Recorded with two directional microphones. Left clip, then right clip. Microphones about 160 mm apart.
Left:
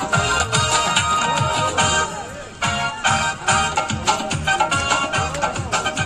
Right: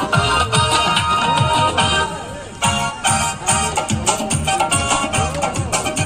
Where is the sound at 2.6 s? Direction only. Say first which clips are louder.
Right 2 dB; 90° right.